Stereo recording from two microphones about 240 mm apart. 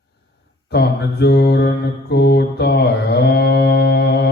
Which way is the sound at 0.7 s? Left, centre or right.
Left.